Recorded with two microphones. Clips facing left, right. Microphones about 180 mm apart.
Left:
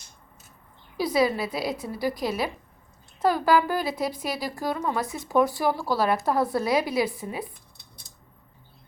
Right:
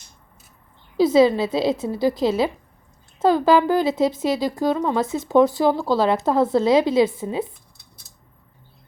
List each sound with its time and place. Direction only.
0.9 s speech: 25° right (ahead or behind)